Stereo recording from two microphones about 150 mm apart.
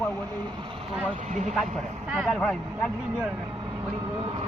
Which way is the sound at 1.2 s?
55° right (ahead or behind).